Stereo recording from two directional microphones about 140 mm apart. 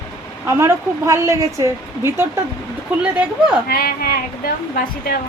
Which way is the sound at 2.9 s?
10° right (ahead or behind).